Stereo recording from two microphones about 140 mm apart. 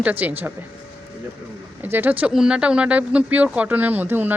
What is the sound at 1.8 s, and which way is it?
Speech, 15° right (ahead or behind).